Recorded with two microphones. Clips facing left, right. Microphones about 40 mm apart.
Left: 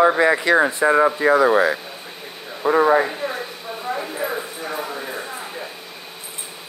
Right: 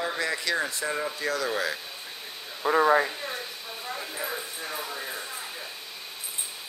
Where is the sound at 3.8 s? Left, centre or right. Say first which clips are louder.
Left 9 dB; left.